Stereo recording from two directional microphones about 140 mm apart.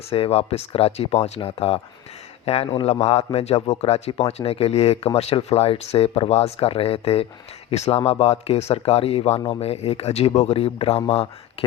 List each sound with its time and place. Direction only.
0.1 s a man's voice: 45° left (ahead or behind)